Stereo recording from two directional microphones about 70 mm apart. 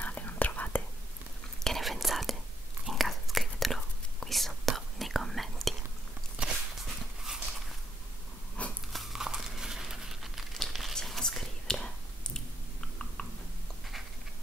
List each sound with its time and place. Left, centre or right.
0.0 s whispering: left
1.6 s whispering: centre
6.4 s walk: centre
8.6 s biting: centre
8.9 s crumpling: centre